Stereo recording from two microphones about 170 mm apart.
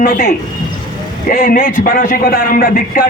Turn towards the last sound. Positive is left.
turn(degrees=55)  # may be behind; listen again after turning